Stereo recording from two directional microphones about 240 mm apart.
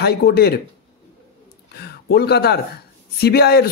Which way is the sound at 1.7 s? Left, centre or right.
Left.